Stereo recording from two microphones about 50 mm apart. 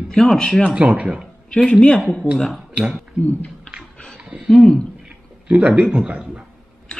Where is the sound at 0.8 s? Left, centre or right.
Right.